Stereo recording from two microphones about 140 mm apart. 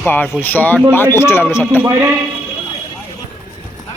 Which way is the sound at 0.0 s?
15° left (ahead or behind).